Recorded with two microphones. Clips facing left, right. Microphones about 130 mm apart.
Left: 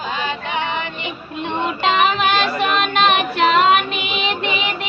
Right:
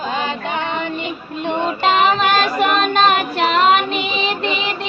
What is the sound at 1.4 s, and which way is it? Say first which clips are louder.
Child singing: right 2 dB; 35° right (ahead or behind).